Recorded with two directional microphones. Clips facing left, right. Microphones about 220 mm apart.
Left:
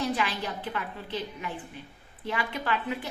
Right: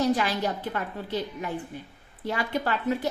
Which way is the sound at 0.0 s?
40° right (ahead or behind).